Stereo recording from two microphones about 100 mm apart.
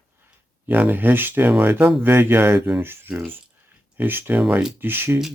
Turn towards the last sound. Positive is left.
turn(degrees=-20)  # may be behind; listen again after turning